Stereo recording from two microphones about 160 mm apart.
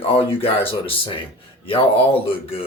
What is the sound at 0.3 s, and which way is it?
Speech, 35° left (ahead or behind).